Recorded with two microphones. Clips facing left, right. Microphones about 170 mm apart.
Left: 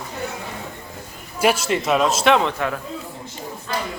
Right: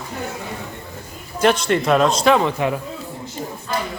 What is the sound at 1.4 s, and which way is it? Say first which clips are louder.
Speech: right 2 dB; 5° left (ahead or behind).